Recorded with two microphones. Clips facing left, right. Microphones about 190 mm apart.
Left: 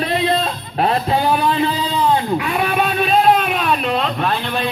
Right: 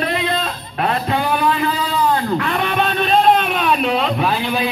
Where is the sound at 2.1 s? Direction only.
10° left (ahead or behind).